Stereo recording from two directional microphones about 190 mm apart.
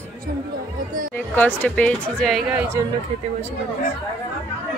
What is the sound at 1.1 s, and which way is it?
Speech, 10° left (ahead or behind).